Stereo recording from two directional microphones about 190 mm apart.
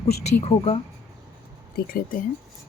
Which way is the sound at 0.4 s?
30° left (ahead or behind).